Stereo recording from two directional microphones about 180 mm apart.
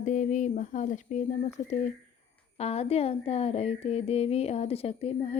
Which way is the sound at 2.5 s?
35° left (ahead or behind).